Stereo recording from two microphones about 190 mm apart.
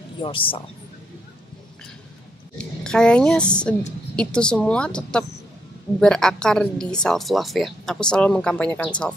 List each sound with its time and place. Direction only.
0.2 s speech: 25° left (ahead or behind)
2.5 s a woman's voice: 5° left (ahead or behind)